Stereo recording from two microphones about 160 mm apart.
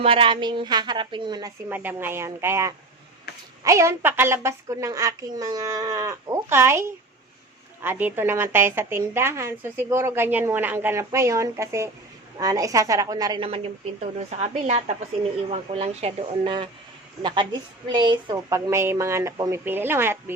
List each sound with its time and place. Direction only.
0.0 s a woman's voice: 35° right (ahead or behind)
1.7 s a woman's voice: 10° right (ahead or behind)
14.2 s a woman's voice: 45° right (ahead or behind); by 20.3 s 15° right (ahead or behind)